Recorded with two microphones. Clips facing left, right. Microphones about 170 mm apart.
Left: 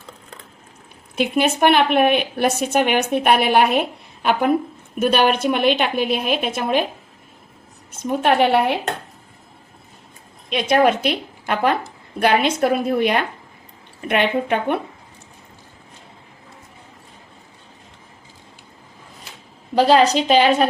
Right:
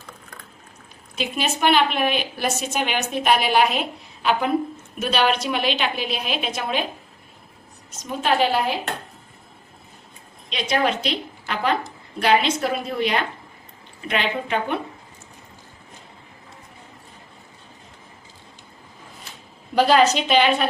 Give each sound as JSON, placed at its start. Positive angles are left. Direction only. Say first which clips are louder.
{"t": 1.1, "sound": "a woman's voice", "louder": "left 7 dB", "side_deg": 60}
{"t": 8.0, "sound": "a woman's voice", "louder": "left 4 dB", "side_deg": 55}
{"t": 10.5, "sound": "a woman's voice", "louder": "left 6 dB", "side_deg": 55}
{"t": 19.7, "sound": "a woman's voice", "louder": "left 2 dB", "side_deg": 30}